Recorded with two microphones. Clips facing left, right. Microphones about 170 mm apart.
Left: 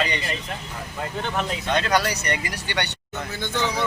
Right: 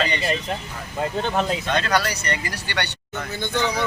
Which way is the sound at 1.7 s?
15° left (ahead or behind).